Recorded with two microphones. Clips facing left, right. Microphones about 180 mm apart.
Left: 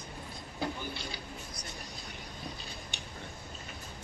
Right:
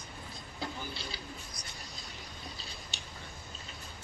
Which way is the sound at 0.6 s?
55° left (ahead or behind).